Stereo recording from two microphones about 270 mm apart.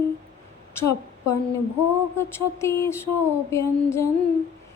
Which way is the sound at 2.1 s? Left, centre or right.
Centre.